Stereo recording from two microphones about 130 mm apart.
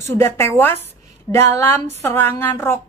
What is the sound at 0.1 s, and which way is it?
A woman's voice, 20° left (ahead or behind).